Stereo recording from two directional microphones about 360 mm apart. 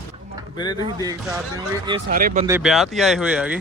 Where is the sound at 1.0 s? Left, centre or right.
Centre.